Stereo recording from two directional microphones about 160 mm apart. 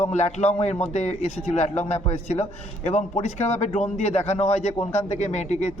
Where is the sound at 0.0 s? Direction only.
45° left (ahead or behind).